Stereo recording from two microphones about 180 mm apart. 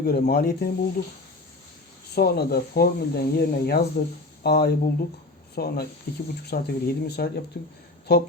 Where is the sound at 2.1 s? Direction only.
60° left (ahead or behind).